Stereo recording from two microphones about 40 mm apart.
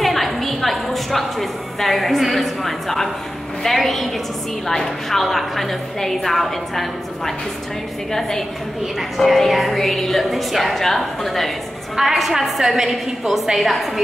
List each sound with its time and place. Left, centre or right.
0.0 s music: centre
3.6 s a woman's voice: centre